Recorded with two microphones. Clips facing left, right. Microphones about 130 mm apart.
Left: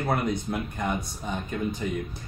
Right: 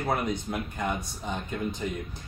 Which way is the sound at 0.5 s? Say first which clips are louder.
Left 2 dB; 15° left (ahead or behind).